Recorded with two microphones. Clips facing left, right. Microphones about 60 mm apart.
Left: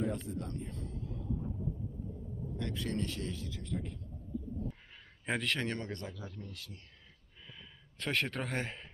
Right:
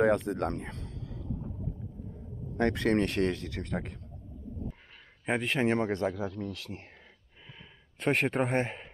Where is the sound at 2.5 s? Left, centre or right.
Right.